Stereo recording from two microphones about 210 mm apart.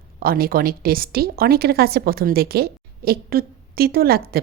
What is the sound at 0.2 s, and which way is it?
A woman's voice, 45° right (ahead or behind).